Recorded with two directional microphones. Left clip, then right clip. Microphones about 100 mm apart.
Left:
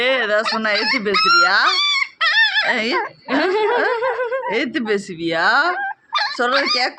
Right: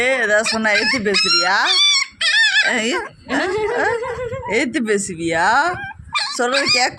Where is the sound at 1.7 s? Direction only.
35° left (ahead or behind).